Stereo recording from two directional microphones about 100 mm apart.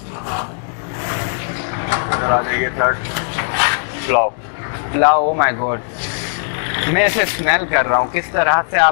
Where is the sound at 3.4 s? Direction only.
15° left (ahead or behind).